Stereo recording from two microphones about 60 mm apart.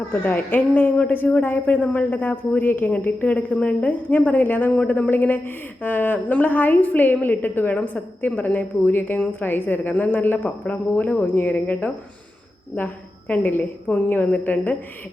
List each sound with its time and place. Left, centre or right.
0.1 s a woman's voice: left